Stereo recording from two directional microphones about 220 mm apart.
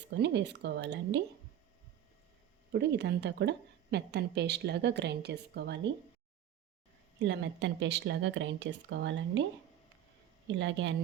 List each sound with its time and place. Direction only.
0.1 s a woman's voice: 50° right (ahead or behind)
2.7 s a woman's voice: 50° right (ahead or behind)
7.2 s speech: 55° right (ahead or behind)
10.6 s speech: 60° right (ahead or behind)